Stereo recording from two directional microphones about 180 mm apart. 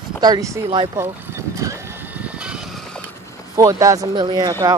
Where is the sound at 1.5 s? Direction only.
20° right (ahead or behind).